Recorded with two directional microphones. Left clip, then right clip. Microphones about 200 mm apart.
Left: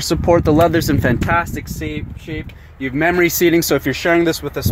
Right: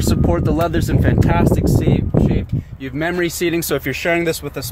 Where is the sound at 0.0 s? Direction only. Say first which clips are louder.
Left 5 dB; 25° left (ahead or behind).